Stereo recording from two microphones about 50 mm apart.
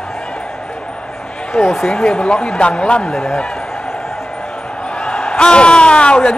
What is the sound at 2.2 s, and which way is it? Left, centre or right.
Speech, left.